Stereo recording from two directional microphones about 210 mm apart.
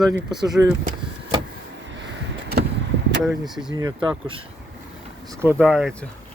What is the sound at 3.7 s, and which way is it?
Speech, 20° right (ahead or behind).